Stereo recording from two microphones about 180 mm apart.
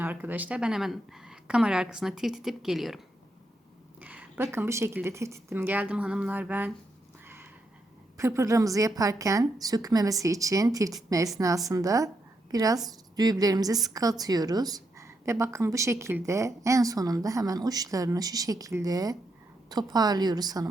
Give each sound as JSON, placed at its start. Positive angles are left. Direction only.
{"t": 0.0, "sound": "speech", "side_deg": -10}
{"t": 4.0, "sound": "a woman's voice", "side_deg": -10}
{"t": 8.2, "sound": "a woman's voice", "side_deg": -15}